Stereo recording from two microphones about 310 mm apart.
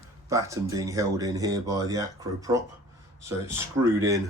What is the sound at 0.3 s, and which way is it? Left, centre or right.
Speech, centre.